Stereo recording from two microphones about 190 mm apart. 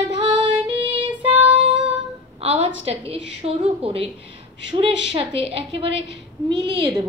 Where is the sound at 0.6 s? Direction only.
25° right (ahead or behind).